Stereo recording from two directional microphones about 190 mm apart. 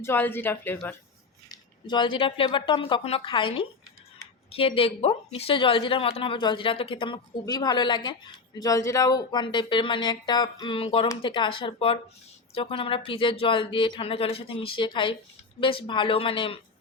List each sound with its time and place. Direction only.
0.0 s speech: 10° left (ahead or behind)
1.5 s a woman's voice: 25° left (ahead or behind)